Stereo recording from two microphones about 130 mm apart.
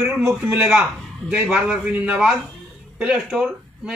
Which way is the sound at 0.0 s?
15° right (ahead or behind).